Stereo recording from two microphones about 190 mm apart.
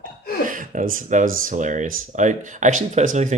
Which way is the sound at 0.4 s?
45° right (ahead or behind).